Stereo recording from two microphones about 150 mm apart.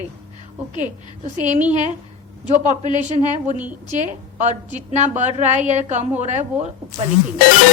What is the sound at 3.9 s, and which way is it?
A woman's voice, 50° right (ahead or behind).